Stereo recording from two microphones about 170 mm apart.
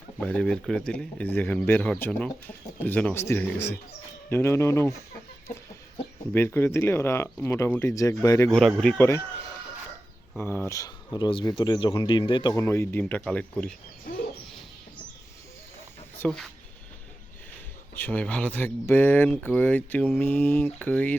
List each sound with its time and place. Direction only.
0.2 s speech: 5° left (ahead or behind)
6.3 s speech: 15° left (ahead or behind)
8.4 s speech: centre (ahead or behind)
10.3 s speech: 10° left (ahead or behind)
12.6 s speech: 15° left (ahead or behind)
16.1 s speech: 5° left (ahead or behind)
17.9 s speech: 10° left (ahead or behind)